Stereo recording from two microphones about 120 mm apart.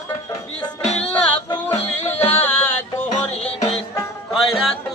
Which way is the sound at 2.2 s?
15° left (ahead or behind).